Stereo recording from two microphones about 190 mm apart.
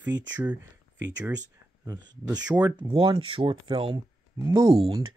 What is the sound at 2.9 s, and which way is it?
Speech, 25° right (ahead or behind).